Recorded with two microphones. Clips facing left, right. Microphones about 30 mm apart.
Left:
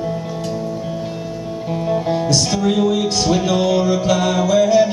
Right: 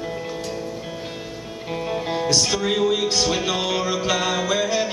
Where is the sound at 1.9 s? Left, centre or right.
Centre.